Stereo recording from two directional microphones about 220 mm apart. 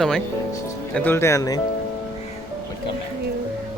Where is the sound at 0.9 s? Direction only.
10° left (ahead or behind).